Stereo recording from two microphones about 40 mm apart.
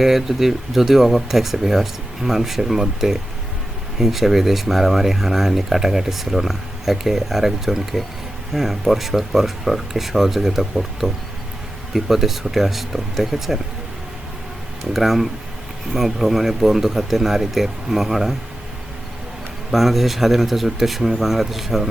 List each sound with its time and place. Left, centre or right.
0.0 s speech: centre
14.9 s speech: centre
19.7 s speech: centre